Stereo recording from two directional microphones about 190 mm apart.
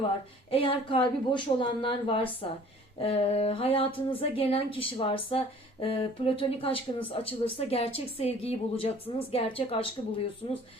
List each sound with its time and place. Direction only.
0.5 s a woman's voice: 30° left (ahead or behind)